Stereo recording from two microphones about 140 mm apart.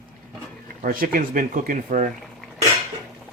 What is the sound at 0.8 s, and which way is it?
Speech, 90° right.